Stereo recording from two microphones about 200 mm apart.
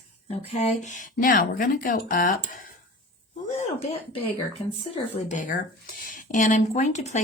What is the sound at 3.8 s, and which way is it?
Speech, 30° left (ahead or behind).